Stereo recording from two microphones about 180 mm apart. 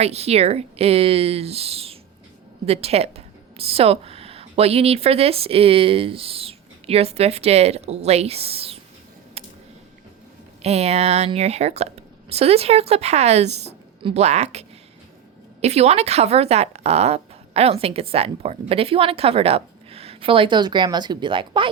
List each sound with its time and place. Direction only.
0.0 s a woman's voice: 35° right (ahead or behind)
9.4 s a sound: 35° right (ahead or behind)
10.6 s speech: 35° right (ahead or behind)
15.6 s speech: 35° right (ahead or behind)